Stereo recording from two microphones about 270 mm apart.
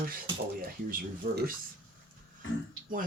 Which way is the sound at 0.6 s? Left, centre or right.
Right.